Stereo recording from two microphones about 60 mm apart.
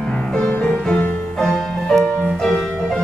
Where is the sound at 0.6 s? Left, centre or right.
Centre.